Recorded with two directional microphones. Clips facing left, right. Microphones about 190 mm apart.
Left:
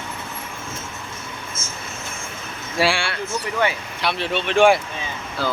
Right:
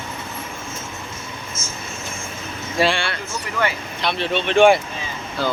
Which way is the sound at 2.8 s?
10° left (ahead or behind).